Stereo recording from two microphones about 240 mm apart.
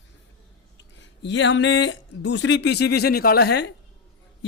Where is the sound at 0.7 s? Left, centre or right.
Left.